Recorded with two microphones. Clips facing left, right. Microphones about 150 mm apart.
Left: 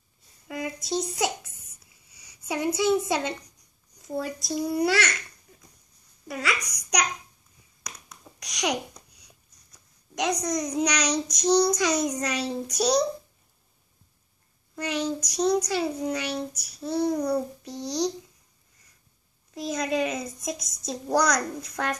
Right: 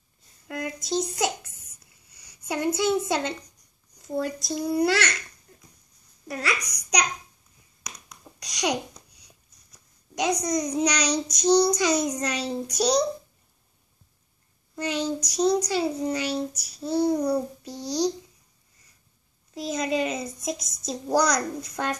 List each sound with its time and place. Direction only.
0.5 s a sound: centre (ahead or behind)
4.0 s a child's voice: centre (ahead or behind)
14.8 s a child's voice: centre (ahead or behind)
19.5 s a child's voice: centre (ahead or behind)